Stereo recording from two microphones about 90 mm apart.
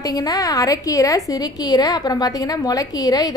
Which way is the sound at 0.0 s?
45° left (ahead or behind).